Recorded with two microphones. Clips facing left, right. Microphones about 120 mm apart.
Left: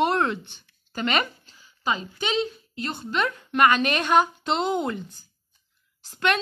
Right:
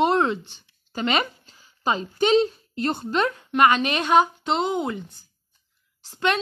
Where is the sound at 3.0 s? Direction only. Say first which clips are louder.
Right 3 dB; 30° right (ahead or behind); by 4.9 s 15° right (ahead or behind).